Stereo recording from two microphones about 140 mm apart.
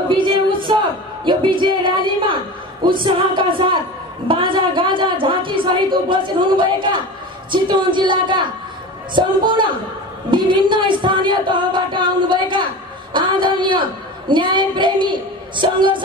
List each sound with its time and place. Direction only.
0.1 s a woman's voice: 35° right (ahead or behind)